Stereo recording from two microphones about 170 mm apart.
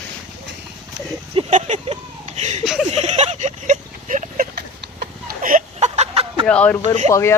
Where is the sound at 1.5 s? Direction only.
45° right (ahead or behind).